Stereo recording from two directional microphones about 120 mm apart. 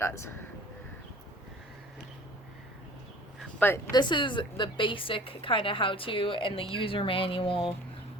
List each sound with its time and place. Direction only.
0.0 s speech: 20° left (ahead or behind)
3.6 s speech: 15° left (ahead or behind)
3.9 s a woman's voice: 40° left (ahead or behind)